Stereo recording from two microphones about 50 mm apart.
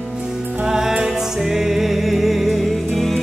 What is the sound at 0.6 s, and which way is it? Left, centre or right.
Music, centre.